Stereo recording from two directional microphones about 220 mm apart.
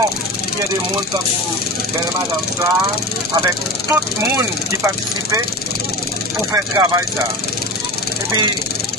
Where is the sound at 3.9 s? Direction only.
10° right (ahead or behind).